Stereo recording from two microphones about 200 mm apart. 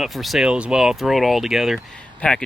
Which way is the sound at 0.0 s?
Centre (ahead or behind).